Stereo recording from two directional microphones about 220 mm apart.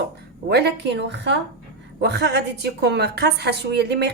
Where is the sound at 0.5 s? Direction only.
50° right (ahead or behind).